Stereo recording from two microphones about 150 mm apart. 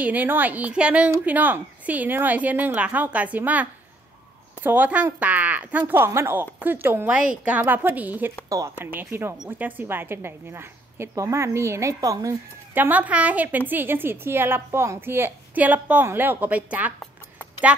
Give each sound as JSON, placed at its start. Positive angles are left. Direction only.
{"t": 0.0, "sound": "a woman's voice", "side_deg": -10}
{"t": 4.6, "sound": "a woman's voice", "side_deg": -10}
{"t": 8.5, "sound": "speech", "side_deg": -25}
{"t": 8.7, "sound": "a woman's voice", "side_deg": -15}